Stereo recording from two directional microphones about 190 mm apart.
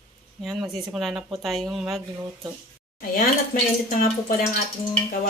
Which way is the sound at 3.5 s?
45° left (ahead or behind).